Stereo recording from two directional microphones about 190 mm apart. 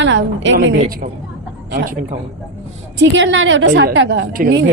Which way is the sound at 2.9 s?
75° right (ahead or behind).